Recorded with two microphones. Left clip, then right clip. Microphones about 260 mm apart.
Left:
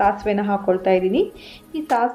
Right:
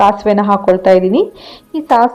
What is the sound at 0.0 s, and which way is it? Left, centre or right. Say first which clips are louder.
A woman's voice: right 9 dB; right.